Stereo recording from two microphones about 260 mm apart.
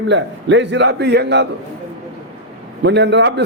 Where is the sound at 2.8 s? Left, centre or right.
Right.